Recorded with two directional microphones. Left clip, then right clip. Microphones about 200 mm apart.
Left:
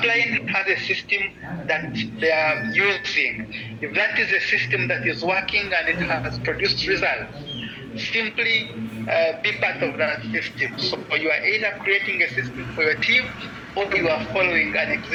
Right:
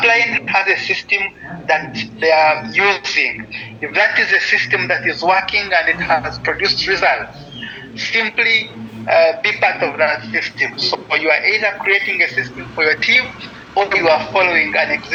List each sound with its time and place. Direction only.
0.0 s a man's voice: 5° left (ahead or behind)